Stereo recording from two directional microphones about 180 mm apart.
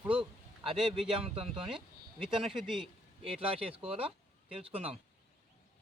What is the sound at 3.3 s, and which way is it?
Speech, 30° right (ahead or behind).